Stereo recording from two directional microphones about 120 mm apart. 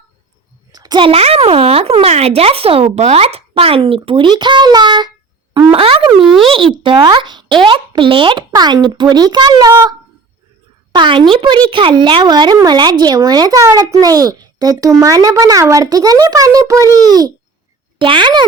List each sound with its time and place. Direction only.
0.7 s a sound: 35° right (ahead or behind)
1.1 s speech: 55° right (ahead or behind); by 5.1 s 40° right (ahead or behind)
5.7 s speech: 50° right (ahead or behind)
6.2 s speech: centre (ahead or behind)
6.5 s a child's voice: 45° right (ahead or behind)
10.9 s a child's voice: 45° right (ahead or behind)
18.0 s a child's voice: 40° right (ahead or behind)